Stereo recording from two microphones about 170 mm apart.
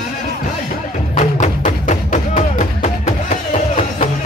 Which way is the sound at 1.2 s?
45° left (ahead or behind).